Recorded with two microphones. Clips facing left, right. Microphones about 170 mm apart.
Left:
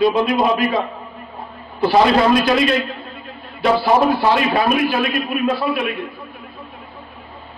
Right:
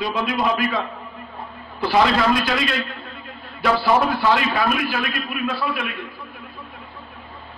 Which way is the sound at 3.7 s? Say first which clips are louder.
Left 4 dB; 30° left (ahead or behind).